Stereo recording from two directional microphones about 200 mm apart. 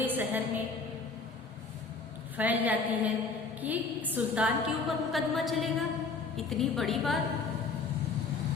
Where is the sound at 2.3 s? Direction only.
10° right (ahead or behind).